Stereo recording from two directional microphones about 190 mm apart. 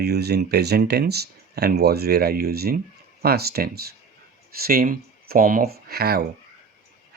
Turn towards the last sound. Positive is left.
turn(degrees=-55)  # may be behind; listen again after turning